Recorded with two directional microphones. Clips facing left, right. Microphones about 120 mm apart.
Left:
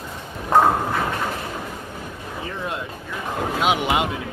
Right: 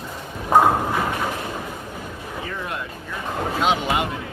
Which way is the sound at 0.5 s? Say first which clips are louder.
Right 1 dB; 10° right (ahead or behind).